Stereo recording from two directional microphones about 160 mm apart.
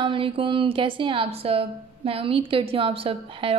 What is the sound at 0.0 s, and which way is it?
A woman's voice, 35° right (ahead or behind).